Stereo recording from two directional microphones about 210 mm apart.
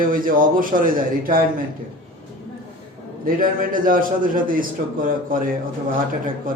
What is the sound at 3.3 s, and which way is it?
A man's voice, 40° right (ahead or behind).